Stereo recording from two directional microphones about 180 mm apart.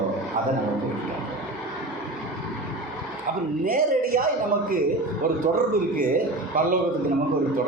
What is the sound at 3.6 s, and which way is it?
Speech, 50° right (ahead or behind).